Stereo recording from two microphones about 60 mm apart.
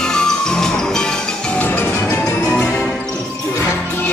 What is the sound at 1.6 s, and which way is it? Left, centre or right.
Music, left.